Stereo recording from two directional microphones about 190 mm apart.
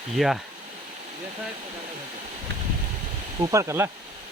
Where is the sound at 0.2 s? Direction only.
Centre (ahead or behind).